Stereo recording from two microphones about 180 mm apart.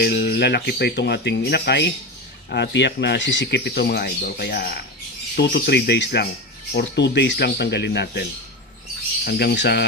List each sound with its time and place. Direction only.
0.0 s speech: 65° left (ahead or behind)